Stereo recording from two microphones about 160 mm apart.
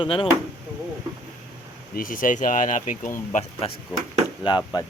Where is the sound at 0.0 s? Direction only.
30° left (ahead or behind).